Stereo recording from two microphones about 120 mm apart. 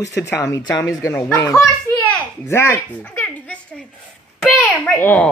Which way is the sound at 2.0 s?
20° left (ahead or behind).